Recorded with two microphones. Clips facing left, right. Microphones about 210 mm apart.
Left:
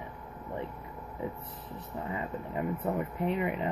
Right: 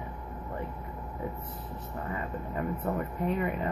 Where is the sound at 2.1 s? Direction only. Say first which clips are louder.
Even; 20° left (ahead or behind).